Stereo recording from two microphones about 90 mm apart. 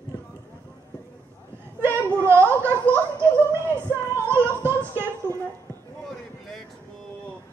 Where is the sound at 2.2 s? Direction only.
25° right (ahead or behind).